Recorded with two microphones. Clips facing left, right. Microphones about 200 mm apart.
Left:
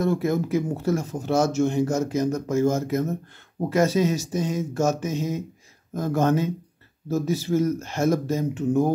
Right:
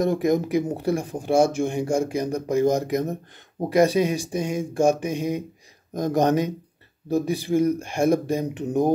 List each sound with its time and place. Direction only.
0.0 s speech: 15° right (ahead or behind)